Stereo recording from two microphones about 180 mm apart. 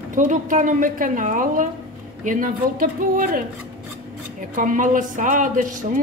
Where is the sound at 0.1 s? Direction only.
45° right (ahead or behind).